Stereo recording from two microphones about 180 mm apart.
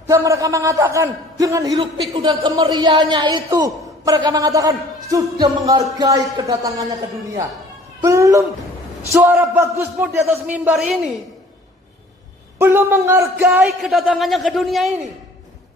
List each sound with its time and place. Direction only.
0.1 s a man's voice: 20° right (ahead or behind)
8.0 s a man's voice: 15° right (ahead or behind)
12.5 s a man's voice: 15° right (ahead or behind)
13.4 s a man's voice: centre (ahead or behind)